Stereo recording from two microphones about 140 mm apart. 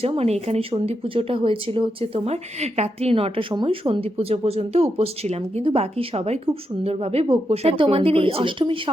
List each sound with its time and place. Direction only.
0.0 s speech: 45° right (ahead or behind)